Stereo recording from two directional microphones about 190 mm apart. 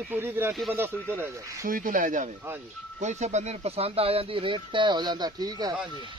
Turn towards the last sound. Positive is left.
turn(degrees=-20)  # may be behind; listen again after turning